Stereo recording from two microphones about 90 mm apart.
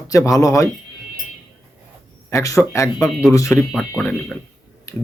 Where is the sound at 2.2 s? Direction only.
35° left (ahead or behind).